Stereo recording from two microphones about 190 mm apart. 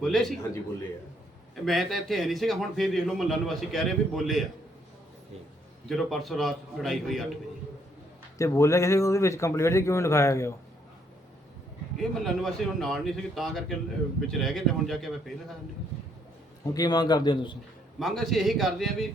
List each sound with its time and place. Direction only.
0.0 s a man's voice: centre (ahead or behind)
1.5 s a man's voice: centre (ahead or behind)
5.9 s a man's voice: centre (ahead or behind)
8.4 s a man's voice: 15° left (ahead or behind)
11.9 s a man's voice: centre (ahead or behind)
16.7 s a man's voice: 20° left (ahead or behind)
18.0 s a man's voice: centre (ahead or behind)